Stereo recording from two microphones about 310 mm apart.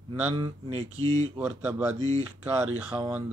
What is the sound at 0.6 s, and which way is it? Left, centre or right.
Speech, right.